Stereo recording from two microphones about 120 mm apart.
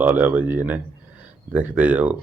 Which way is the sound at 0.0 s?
15° right (ahead or behind).